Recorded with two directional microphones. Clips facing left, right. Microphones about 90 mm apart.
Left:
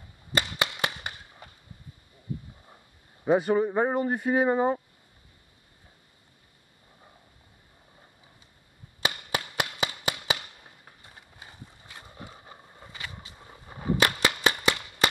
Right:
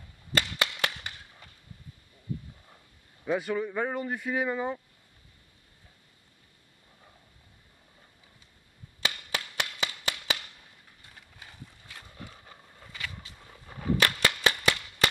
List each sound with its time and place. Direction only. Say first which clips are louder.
0.3 s cap gun: left 1 dB; 10° left (ahead or behind)
3.3 s speech: left 7 dB; 35° left (ahead or behind)
9.0 s a sound: left 3 dB; 10° left (ahead or behind)
11.8 s horse: left 3 dB; 10° left (ahead or behind)
12.1 s a sound: left 3 dB; 20° left (ahead or behind)
13.4 s cap gun: left 1 dB; 20° left (ahead or behind)